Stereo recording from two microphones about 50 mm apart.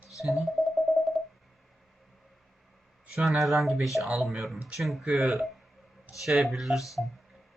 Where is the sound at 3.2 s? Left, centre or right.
Centre.